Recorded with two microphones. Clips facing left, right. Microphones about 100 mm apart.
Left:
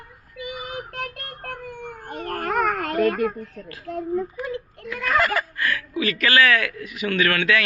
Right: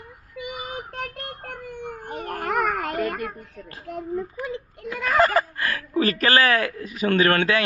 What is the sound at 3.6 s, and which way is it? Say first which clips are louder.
Speech: left 3 dB; 15° right (ahead or behind).